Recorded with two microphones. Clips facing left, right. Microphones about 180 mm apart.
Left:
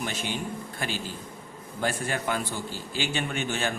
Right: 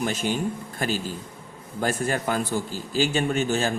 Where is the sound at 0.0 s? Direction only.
45° right (ahead or behind).